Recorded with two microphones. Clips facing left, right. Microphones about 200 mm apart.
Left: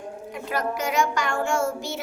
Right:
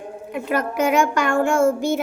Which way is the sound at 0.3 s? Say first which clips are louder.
Right 6 dB; 60° right (ahead or behind).